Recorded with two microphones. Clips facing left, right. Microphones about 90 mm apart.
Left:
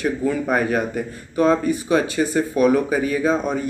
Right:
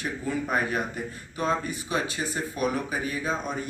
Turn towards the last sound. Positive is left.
turn(degrees=60)  # may be behind; listen again after turning